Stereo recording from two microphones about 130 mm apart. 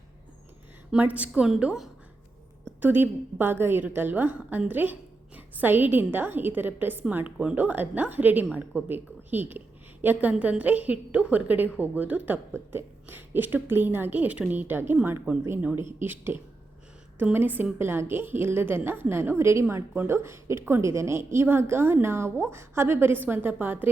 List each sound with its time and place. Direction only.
0.9 s a woman's voice: 10° right (ahead or behind)